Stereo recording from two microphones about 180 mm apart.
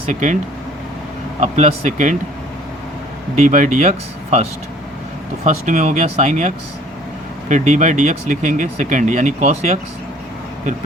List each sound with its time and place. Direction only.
0.1 s speech: 45° right (ahead or behind)
1.4 s speech: 40° right (ahead or behind)
3.3 s speech: 45° right (ahead or behind)